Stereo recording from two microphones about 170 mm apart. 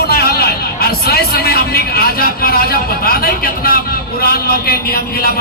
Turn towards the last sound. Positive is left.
turn(degrees=60)  # may be behind; listen again after turning